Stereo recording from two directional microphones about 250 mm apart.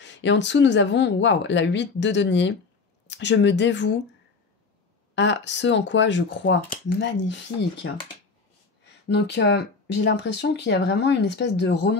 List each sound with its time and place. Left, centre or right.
0.0 s speech: left
5.1 s speech: left
9.1 s speech: left